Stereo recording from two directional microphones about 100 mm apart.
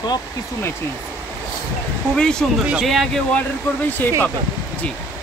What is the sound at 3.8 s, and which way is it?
Speech, 20° left (ahead or behind).